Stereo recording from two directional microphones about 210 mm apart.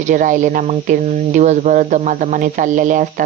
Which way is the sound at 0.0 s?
40° right (ahead or behind).